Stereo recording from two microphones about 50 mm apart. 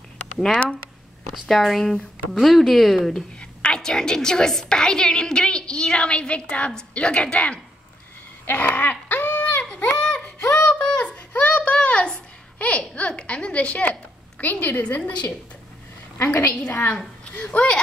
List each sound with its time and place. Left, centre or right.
0.4 s speech: centre
1.6 s speech: centre
3.3 s a woman's voice: centre; by 8.9 s left
9.1 s a sound: left
9.9 s a sound: centre
10.6 s child singing: left
11.8 s babbling: left
14.4 s a woman's voice: left
16.4 s a woman's voice: left